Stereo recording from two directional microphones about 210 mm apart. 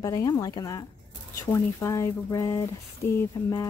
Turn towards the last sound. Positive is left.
turn(degrees=15)  # may be behind; listen again after turning